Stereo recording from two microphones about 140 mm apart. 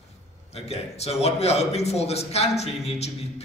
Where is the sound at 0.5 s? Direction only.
50° left (ahead or behind).